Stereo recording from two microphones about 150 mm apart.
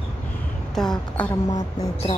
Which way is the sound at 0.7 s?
5° left (ahead or behind).